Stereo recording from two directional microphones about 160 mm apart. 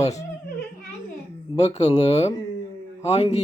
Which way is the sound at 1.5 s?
45° left (ahead or behind).